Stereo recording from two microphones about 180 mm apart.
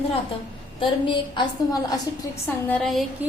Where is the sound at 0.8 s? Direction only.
25° left (ahead or behind).